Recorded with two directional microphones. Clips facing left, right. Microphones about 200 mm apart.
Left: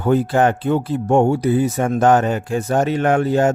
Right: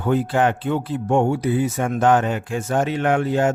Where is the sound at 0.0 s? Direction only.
40° left (ahead or behind).